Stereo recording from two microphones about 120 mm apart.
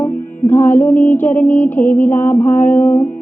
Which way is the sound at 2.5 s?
90° left.